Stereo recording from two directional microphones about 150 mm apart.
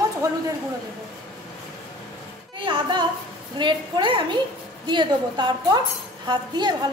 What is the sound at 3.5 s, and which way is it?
A woman's voice, 30° right (ahead or behind).